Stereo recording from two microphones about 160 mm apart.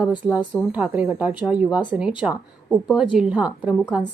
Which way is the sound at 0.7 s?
10° right (ahead or behind).